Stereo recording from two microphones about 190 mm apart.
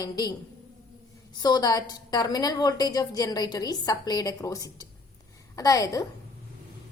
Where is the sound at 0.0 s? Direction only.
20° left (ahead or behind).